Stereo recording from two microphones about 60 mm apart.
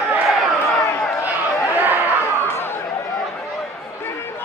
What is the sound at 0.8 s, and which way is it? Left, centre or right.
Run, left.